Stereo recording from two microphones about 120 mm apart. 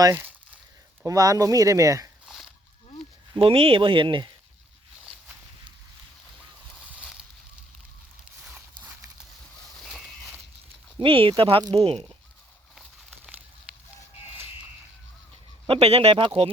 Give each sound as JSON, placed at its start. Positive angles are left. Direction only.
{"t": 0.0, "sound": "speech", "side_deg": -25}
{"t": 2.2, "sound": "a sound", "side_deg": 0}
{"t": 3.3, "sound": "speech", "side_deg": -50}
{"t": 8.4, "sound": "walk", "side_deg": -15}
{"t": 9.8, "sound": "a sound", "side_deg": 0}
{"t": 11.0, "sound": "speech", "side_deg": -45}
{"t": 11.6, "sound": "speech", "side_deg": -30}
{"t": 11.9, "sound": "speech", "side_deg": -50}
{"t": 12.7, "sound": "a sound", "side_deg": 0}
{"t": 15.6, "sound": "speech", "side_deg": -55}